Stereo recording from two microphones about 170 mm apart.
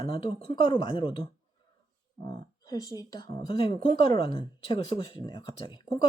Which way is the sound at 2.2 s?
20° left (ahead or behind).